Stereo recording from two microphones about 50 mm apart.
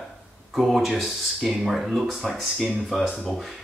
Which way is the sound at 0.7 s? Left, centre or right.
Centre.